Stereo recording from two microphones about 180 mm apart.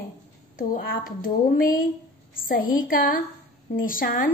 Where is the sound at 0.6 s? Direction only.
50° left (ahead or behind).